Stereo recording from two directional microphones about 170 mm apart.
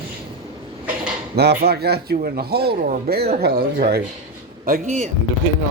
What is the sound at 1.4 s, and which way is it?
Speech, 70° right (ahead or behind).